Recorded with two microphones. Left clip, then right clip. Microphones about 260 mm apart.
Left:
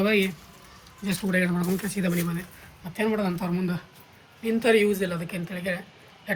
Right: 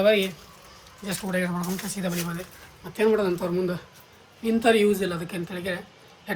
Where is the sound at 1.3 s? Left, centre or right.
Right.